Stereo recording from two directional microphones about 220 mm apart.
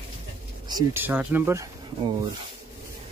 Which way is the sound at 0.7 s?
15° right (ahead or behind).